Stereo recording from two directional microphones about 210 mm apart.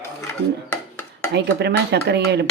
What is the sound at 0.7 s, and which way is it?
Dishes, 10° left (ahead or behind).